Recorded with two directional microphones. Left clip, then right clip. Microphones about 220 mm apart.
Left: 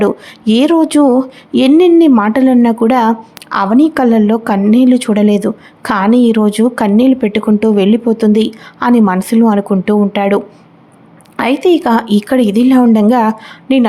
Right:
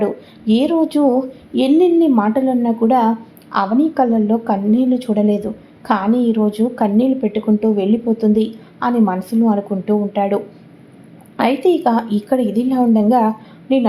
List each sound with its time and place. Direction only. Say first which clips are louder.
0.0 s speech: left 6 dB; 30° left (ahead or behind)